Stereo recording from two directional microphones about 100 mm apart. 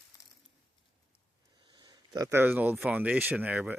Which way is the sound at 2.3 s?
20° right (ahead or behind).